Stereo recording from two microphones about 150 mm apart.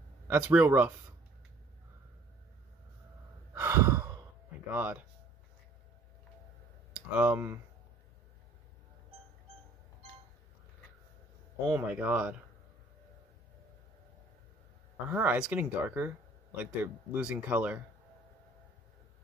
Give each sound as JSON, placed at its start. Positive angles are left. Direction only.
{"t": 0.3, "sound": "speech", "side_deg": -10}
{"t": 3.5, "sound": "sigh", "side_deg": -15}
{"t": 4.6, "sound": "speech", "side_deg": -10}
{"t": 7.2, "sound": "speech", "side_deg": -15}
{"t": 11.7, "sound": "speech", "side_deg": -10}
{"t": 15.0, "sound": "speech", "side_deg": -10}